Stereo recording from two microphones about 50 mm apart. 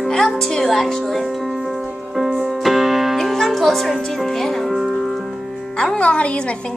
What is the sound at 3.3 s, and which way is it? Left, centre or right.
Music, centre.